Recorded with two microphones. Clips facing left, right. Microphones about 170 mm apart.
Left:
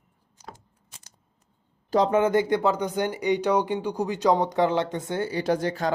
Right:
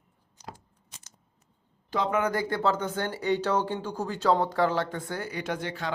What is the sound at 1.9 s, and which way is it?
Speech, 35° left (ahead or behind).